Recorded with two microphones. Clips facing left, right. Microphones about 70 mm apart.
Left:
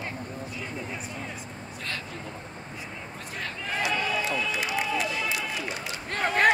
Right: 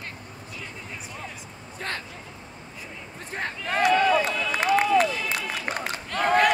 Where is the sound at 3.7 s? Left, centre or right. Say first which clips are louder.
Right 9 dB; right.